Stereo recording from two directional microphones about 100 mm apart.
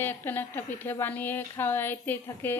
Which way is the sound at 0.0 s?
20° left (ahead or behind).